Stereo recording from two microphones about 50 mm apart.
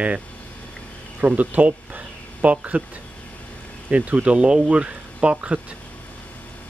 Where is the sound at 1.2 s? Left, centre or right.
Right.